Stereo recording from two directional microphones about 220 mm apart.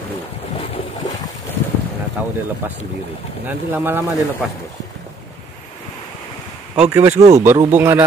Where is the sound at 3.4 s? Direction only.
10° right (ahead or behind).